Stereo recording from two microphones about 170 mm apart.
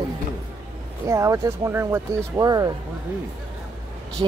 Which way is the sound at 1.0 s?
20° right (ahead or behind).